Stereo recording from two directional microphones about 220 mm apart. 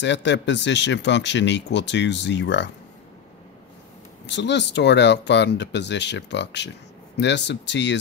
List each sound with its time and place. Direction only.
0.0 s speech: 55° left (ahead or behind)
4.3 s speech: 50° left (ahead or behind)